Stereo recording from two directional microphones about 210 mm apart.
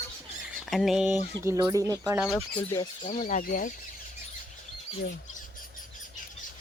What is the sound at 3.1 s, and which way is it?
Speech, 35° left (ahead or behind).